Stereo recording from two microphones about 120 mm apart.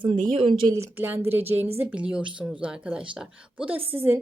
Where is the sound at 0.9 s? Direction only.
15° right (ahead or behind).